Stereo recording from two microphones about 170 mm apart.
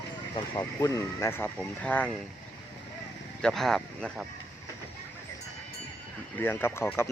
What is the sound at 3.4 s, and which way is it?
Speech, centre (ahead or behind).